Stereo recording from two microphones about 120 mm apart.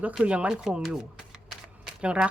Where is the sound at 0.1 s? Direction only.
10° right (ahead or behind).